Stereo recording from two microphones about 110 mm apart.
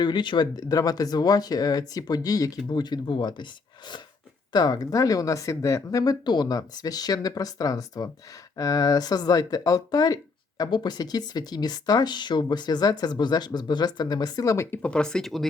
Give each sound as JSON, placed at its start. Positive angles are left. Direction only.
{"t": 0.0, "sound": "speech", "side_deg": 45}
{"t": 14.8, "sound": "speech", "side_deg": 10}